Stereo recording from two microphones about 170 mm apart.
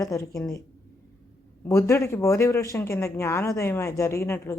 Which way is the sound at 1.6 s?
15° left (ahead or behind).